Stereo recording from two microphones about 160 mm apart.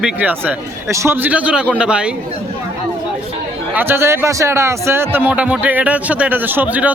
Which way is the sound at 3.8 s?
15° right (ahead or behind).